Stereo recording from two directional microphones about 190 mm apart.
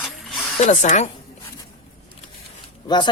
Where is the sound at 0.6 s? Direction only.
40° left (ahead or behind).